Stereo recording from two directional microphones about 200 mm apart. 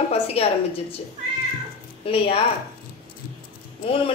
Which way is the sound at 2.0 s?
25° left (ahead or behind).